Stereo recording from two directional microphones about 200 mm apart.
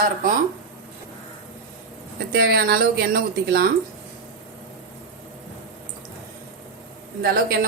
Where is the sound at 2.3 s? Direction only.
50° right (ahead or behind).